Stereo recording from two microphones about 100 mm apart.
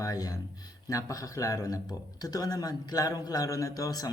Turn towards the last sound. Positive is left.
turn(degrees=40)  # may be behind; listen again after turning